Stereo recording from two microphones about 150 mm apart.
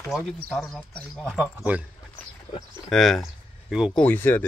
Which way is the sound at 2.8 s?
Centre (ahead or behind).